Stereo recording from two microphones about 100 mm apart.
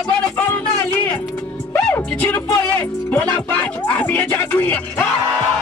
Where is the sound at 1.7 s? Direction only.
20° left (ahead or behind).